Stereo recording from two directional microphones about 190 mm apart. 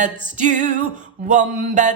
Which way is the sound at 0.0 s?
40° right (ahead or behind).